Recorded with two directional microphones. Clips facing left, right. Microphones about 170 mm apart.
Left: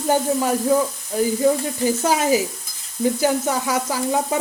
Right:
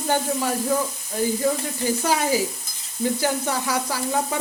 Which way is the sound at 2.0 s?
20° left (ahead or behind).